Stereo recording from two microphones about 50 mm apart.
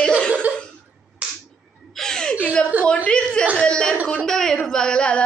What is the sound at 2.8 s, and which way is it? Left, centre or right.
A woman's voice, left.